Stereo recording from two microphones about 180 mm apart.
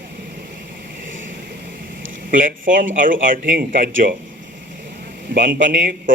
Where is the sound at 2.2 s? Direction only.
50° right (ahead or behind).